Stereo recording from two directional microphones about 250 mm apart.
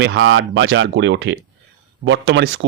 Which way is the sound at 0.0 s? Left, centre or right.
Right.